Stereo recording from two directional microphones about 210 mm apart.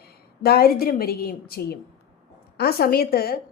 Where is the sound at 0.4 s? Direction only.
45° left (ahead or behind).